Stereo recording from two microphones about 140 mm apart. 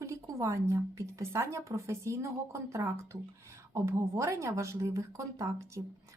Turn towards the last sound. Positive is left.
turn(degrees=-20)  # may be behind; listen again after turning